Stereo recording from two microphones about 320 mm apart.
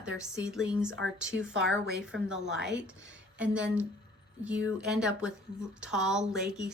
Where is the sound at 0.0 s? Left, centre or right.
Centre.